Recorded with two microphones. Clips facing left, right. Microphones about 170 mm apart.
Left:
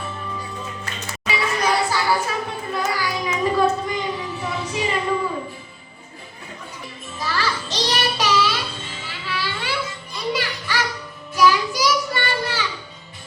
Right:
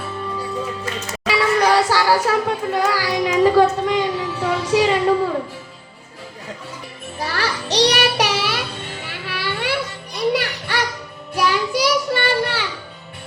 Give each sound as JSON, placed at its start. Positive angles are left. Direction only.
{"t": 0.0, "sound": "music", "side_deg": -75}
{"t": 1.1, "sound": "a sound", "side_deg": -80}
{"t": 7.2, "sound": "music", "side_deg": -65}
{"t": 11.3, "sound": "child singing", "side_deg": -65}